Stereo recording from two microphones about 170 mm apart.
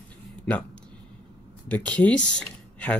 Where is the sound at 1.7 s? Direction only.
10° left (ahead or behind).